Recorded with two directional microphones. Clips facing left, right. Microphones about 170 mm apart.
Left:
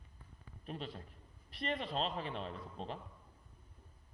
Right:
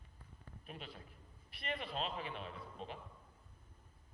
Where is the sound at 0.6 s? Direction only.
35° left (ahead or behind).